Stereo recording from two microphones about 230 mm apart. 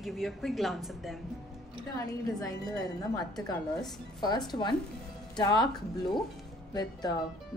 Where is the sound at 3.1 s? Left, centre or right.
Centre.